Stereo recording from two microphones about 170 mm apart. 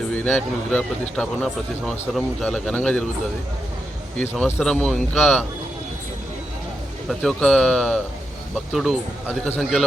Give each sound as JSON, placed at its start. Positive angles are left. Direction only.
{"t": 0.1, "sound": "speech", "side_deg": 10}
{"t": 4.2, "sound": "speech", "side_deg": 10}
{"t": 7.1, "sound": "speech", "side_deg": 5}